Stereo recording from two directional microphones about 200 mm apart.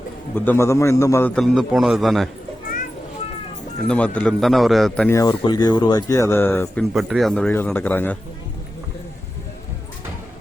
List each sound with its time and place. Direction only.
0.3 s speech: 10° left (ahead or behind)
1.4 s a man's voice: centre (ahead or behind)
3.8 s a man's voice: 5° left (ahead or behind)
5.1 s speech: 20° left (ahead or behind)
6.9 s speech: centre (ahead or behind)